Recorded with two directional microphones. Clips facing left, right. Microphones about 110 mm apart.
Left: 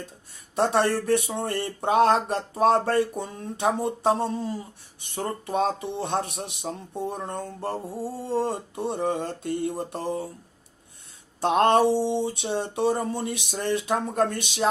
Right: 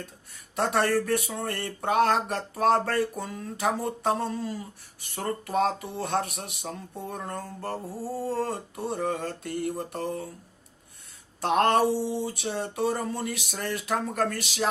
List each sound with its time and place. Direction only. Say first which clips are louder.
0.5 s speech: left 2 dB; 25° left (ahead or behind)
11.3 s a sound: left 3 dB; 25° left (ahead or behind)
12.0 s speech: left 4 dB; 25° left (ahead or behind)